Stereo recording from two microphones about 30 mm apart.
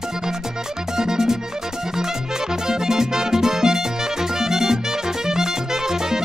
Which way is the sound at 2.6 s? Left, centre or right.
Centre.